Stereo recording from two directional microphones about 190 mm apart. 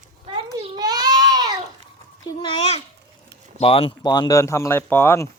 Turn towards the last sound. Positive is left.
turn(degrees=15)  # may be behind; listen again after turning